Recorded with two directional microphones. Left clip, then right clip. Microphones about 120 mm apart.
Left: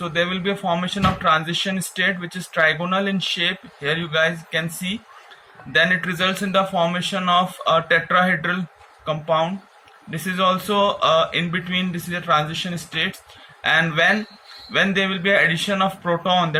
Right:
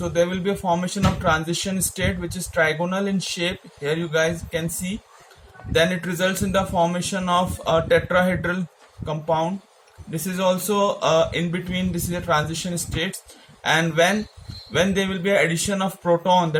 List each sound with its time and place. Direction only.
0.0 s speech: 35° right (ahead or behind)
13.6 s speech: 35° right (ahead or behind)